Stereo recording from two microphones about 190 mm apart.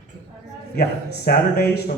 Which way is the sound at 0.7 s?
55° left (ahead or behind).